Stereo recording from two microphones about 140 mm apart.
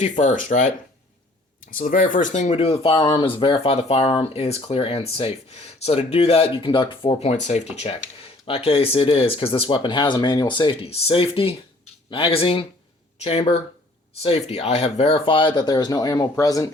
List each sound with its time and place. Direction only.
0.0 s speech: 60° left (ahead or behind)
1.8 s speech: 70° left (ahead or behind)
2.6 s speech: 45° left (ahead or behind)
7.8 s speech: 40° left (ahead or behind); by 16.6 s 25° left (ahead or behind)